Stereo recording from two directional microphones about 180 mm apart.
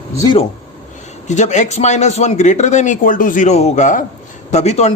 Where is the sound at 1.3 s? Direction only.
40° left (ahead or behind).